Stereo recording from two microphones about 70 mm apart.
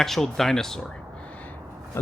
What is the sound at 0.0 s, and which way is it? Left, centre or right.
Speech, centre.